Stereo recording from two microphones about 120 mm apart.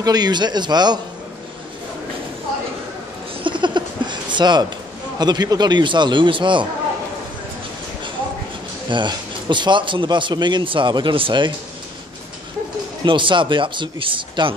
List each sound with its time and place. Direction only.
0.0 s speech: 35° right (ahead or behind)
3.4 s a sound: 40° right (ahead or behind)
5.2 s speech: 35° right (ahead or behind)
8.9 s speech: 40° right (ahead or behind)
13.0 s speech: 40° right (ahead or behind)